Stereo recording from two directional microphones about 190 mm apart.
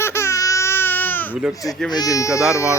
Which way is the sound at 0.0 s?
15° left (ahead or behind).